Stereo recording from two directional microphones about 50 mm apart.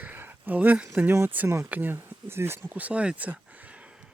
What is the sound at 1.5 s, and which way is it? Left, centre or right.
Speech, right.